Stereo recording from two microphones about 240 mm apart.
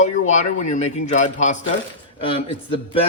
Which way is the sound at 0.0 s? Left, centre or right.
Left.